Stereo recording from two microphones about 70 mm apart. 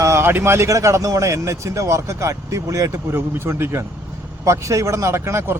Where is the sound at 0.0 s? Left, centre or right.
Right.